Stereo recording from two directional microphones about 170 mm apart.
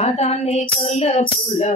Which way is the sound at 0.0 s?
40° left (ahead or behind).